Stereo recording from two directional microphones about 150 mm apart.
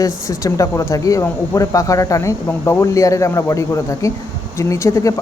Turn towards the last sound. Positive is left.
turn(degrees=20)  # may be behind; listen again after turning